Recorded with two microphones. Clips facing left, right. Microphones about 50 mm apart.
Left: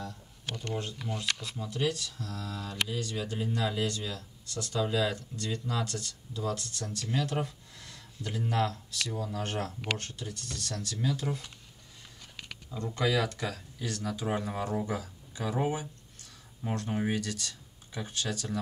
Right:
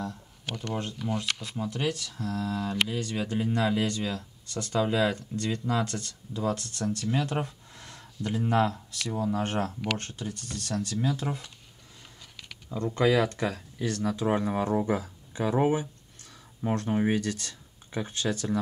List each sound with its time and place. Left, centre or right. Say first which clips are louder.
1.0 s speech: right 3 dB; right
10.6 s speech: right 5 dB; centre
12.7 s speech: right 5 dB; right